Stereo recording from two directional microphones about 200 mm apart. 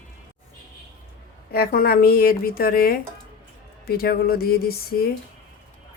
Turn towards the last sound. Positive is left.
turn(degrees=50)  # may be behind; listen again after turning